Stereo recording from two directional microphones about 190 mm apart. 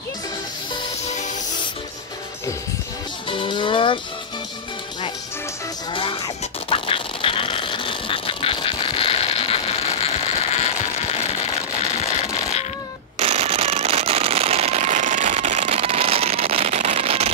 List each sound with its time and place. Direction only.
3.3 s speech: 25° left (ahead or behind)
5.9 s music: 30° left (ahead or behind)
13.2 s fireworks: 35° right (ahead or behind)